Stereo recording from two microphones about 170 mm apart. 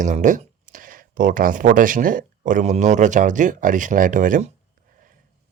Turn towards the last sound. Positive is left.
turn(degrees=-50)  # may be behind; listen again after turning